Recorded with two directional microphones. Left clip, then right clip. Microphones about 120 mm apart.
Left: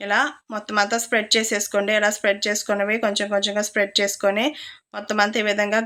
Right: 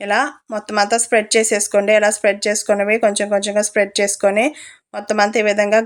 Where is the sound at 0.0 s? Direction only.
45° right (ahead or behind).